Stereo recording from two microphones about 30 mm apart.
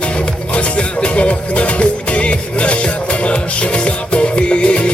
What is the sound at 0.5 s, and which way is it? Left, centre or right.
Music, left.